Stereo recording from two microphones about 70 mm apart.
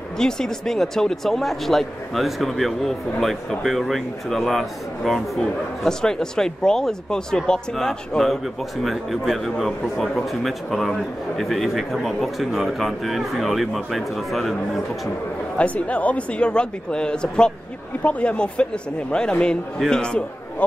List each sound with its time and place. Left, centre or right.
0.2 s speech: centre
15.5 s speech: centre